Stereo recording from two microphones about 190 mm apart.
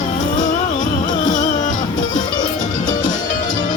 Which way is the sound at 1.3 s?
40° left (ahead or behind).